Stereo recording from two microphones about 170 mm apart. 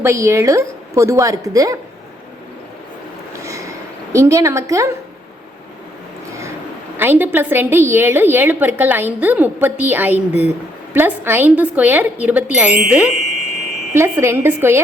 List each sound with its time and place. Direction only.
0.0 s a woman's voice: 15° right (ahead or behind)
3.4 s a sound: 20° right (ahead or behind)
6.9 s a woman's voice: 10° right (ahead or behind)